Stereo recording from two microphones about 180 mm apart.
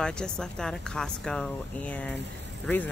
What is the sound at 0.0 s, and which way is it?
Speech, 5° left (ahead or behind).